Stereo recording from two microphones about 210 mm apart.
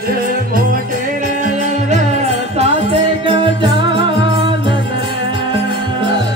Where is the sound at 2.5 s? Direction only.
30° right (ahead or behind).